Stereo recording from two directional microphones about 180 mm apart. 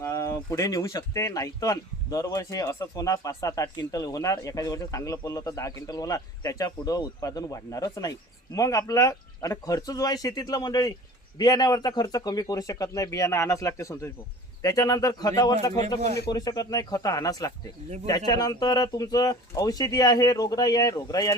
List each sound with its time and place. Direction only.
0.0 s speech: 15° left (ahead or behind)